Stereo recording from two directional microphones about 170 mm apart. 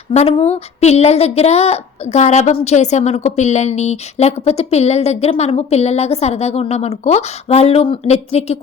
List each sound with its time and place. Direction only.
0.1 s a woman's voice: 40° left (ahead or behind)